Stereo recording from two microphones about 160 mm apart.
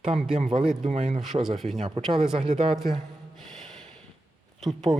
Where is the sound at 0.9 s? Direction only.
45° right (ahead or behind).